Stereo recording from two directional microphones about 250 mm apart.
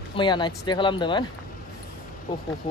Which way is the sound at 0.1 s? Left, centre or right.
Centre.